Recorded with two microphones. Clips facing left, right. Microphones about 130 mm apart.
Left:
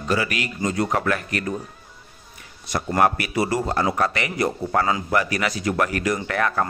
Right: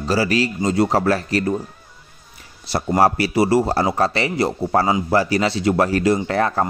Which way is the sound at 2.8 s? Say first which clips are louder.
Right 4 dB; 25° right (ahead or behind).